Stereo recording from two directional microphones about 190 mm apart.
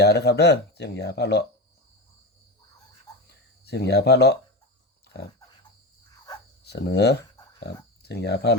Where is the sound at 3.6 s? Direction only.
60° left (ahead or behind).